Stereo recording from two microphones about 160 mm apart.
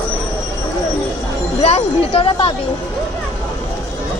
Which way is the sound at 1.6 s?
35° left (ahead or behind).